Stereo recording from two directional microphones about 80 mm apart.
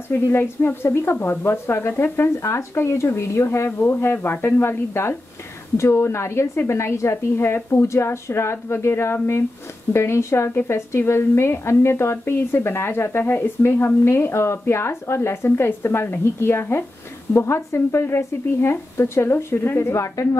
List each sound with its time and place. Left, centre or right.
0.1 s a woman's voice: left